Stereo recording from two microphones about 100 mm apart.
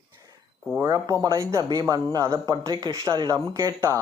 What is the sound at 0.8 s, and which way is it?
Speech, 30° right (ahead or behind).